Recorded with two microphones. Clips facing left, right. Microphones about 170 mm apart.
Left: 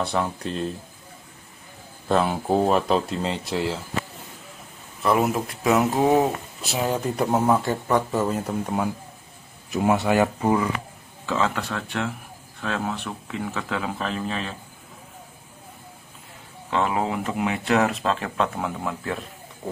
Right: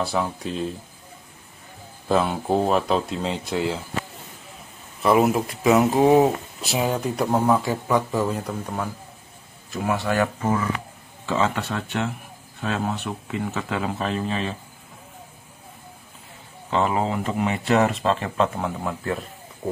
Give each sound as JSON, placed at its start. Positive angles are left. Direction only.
{"t": 0.0, "sound": "speech", "side_deg": 0}
{"t": 2.0, "sound": "speech", "side_deg": 0}
{"t": 5.0, "sound": "a man's voice", "side_deg": -5}
{"t": 11.2, "sound": "speech", "side_deg": 0}
{"t": 16.7, "sound": "speech", "side_deg": 0}